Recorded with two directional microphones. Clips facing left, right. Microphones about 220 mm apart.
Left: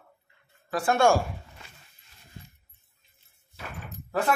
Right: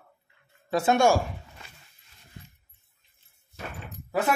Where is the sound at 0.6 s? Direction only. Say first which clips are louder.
Right 3 dB; 25° right (ahead or behind).